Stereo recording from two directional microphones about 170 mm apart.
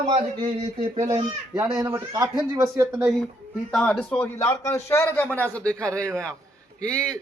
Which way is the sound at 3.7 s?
5° left (ahead or behind).